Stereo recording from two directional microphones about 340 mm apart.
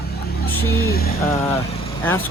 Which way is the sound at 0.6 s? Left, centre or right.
Left.